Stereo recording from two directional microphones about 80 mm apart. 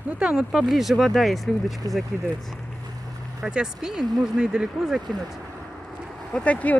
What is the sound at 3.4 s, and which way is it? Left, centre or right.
Speech, centre.